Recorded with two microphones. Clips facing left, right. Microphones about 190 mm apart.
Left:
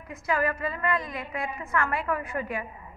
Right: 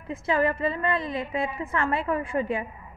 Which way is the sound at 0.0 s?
25° right (ahead or behind).